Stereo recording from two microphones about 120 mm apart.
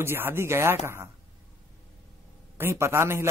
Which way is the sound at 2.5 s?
20° right (ahead or behind).